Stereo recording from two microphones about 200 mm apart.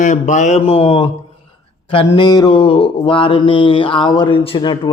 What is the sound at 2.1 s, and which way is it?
A man's voice, 20° left (ahead or behind).